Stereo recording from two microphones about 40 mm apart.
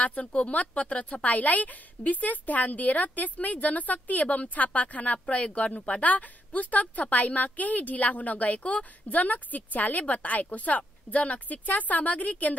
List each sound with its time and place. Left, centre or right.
0.0 s a woman's voice: left